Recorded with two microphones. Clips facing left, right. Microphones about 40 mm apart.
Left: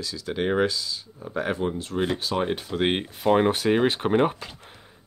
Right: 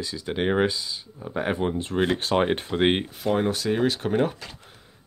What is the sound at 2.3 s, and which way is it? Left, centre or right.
Speech, right.